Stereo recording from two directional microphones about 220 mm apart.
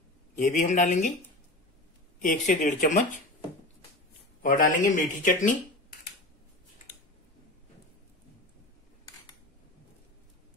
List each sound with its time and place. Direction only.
0.4 s speech: 35° left (ahead or behind)
2.2 s speech: 35° left (ahead or behind)
4.4 s speech: 40° left (ahead or behind)